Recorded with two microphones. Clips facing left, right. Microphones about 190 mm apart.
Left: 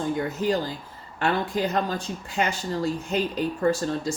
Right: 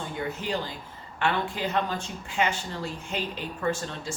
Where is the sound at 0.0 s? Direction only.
40° left (ahead or behind).